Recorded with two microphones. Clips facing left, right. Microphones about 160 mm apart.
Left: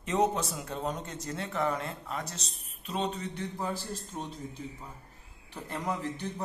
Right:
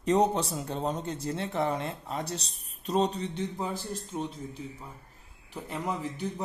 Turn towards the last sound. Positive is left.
turn(degrees=-10)  # may be behind; listen again after turning